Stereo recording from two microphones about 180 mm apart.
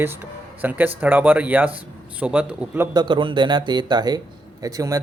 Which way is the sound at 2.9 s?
25° right (ahead or behind).